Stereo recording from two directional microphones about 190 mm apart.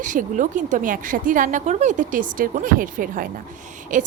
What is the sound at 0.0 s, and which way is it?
A woman's voice, 45° right (ahead or behind).